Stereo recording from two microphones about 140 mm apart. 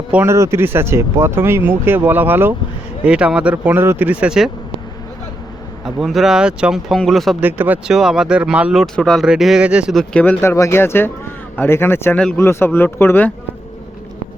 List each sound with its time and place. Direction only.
0.1 s speech: 10° right (ahead or behind)
5.8 s speech: centre (ahead or behind)
7.4 s speech: 10° right (ahead or behind); by 10.3 s 5° left (ahead or behind)
10.4 s speech: 20° left (ahead or behind)